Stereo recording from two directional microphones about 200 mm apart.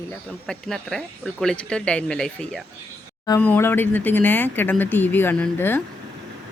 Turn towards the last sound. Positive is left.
turn(degrees=10)  # may be behind; listen again after turning